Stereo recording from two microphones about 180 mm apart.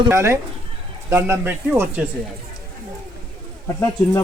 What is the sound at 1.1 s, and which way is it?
Speech, 10° right (ahead or behind).